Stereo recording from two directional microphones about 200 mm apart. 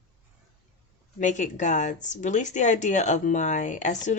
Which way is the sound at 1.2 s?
40° left (ahead or behind).